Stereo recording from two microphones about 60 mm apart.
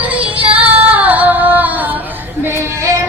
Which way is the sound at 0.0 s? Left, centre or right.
Right.